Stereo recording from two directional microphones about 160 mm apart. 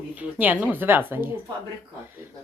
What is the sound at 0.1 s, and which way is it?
Speech, 10° right (ahead or behind).